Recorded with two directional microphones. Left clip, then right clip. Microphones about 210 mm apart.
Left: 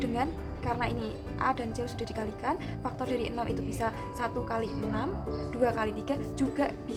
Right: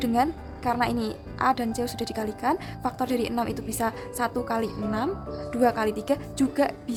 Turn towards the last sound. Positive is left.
turn(degrees=-45)  # may be behind; listen again after turning